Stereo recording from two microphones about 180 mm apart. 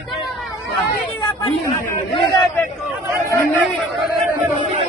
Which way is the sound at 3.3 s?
10° left (ahead or behind).